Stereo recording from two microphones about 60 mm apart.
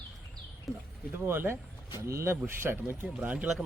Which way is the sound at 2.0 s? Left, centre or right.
Right.